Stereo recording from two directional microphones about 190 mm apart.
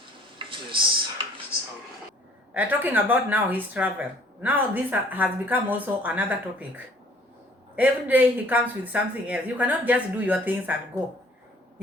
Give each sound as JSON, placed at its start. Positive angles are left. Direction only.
{"t": 0.3, "sound": "stir", "side_deg": -25}
{"t": 2.5, "sound": "speech", "side_deg": -10}